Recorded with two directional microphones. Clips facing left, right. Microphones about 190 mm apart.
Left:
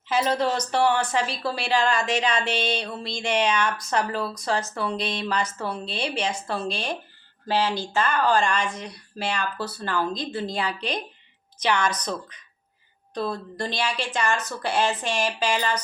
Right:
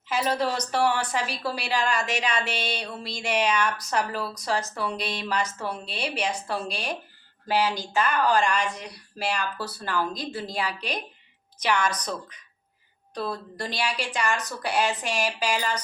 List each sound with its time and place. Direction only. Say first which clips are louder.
0.1 s speech: left 3 dB; 10° right (ahead or behind)
5.4 s a woman's voice: left 1 dB; 30° left (ahead or behind)
5.8 s speech: left 2 dB; 10° right (ahead or behind)
13.1 s speech: left 3 dB; 5° right (ahead or behind)